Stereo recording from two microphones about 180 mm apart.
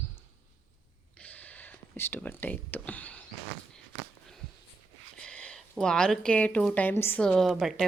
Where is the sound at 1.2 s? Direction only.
10° left (ahead or behind).